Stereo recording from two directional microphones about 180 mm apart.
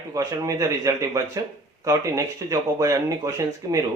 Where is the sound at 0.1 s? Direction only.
20° right (ahead or behind).